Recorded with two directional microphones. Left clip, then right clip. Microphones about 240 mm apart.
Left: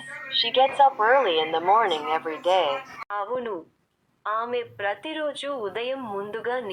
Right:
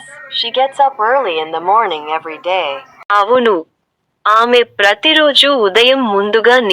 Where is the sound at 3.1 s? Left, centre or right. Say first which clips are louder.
Right 19 dB; right.